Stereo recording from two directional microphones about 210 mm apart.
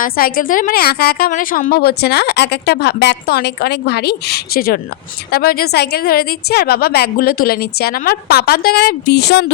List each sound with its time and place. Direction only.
0.0 s a woman's voice: 40° left (ahead or behind)